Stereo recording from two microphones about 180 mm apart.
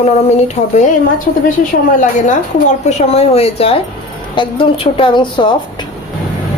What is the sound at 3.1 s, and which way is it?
A woman's voice, 35° left (ahead or behind).